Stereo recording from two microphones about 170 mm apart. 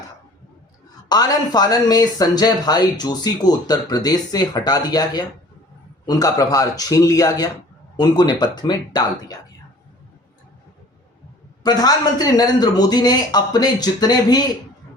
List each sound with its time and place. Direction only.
1.0 s speech: 25° left (ahead or behind)
11.6 s speech: 25° left (ahead or behind)